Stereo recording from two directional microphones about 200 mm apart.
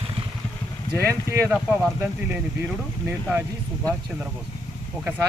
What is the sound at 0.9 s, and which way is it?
Speech, 15° right (ahead or behind).